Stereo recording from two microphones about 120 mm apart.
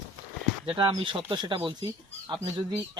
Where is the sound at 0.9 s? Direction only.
40° right (ahead or behind).